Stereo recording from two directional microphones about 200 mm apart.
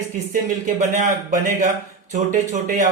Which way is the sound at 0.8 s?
40° right (ahead or behind).